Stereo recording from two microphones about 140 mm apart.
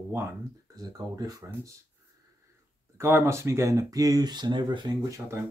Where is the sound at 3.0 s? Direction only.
20° right (ahead or behind).